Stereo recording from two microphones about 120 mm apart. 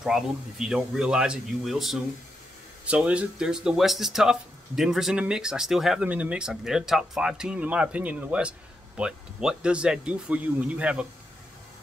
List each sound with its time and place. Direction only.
0.0 s speech: 5° right (ahead or behind)